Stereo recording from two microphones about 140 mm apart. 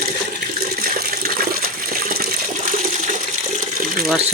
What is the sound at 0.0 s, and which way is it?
Toilet flush, 90° right.